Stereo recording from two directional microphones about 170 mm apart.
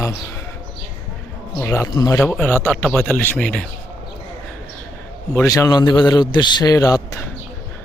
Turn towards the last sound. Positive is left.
turn(degrees=20)  # may be behind; listen again after turning